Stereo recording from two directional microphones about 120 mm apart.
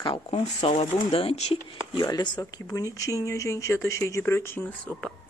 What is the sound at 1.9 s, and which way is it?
Speech, 35° left (ahead or behind).